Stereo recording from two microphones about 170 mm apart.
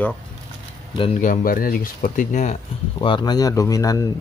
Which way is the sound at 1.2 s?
50° left (ahead or behind).